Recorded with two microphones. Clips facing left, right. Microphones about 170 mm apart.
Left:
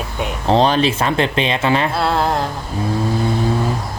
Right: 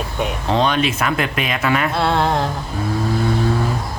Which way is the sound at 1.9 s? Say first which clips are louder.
Even; centre (ahead or behind).